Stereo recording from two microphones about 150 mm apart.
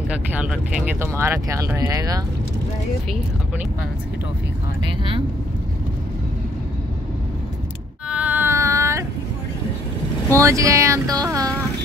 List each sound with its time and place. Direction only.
0.3 s speech: 5° right (ahead or behind); by 2.2 s 25° right (ahead or behind)
8.1 s a sound: 10° right (ahead or behind)
10.3 s speech: 20° right (ahead or behind)